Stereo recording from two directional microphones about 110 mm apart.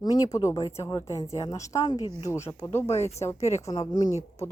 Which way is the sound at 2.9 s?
80° left.